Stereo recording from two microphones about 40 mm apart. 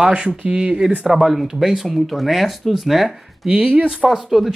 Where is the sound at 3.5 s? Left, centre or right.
Right.